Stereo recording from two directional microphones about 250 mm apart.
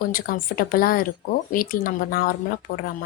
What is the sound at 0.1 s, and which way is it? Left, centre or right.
Speech, left.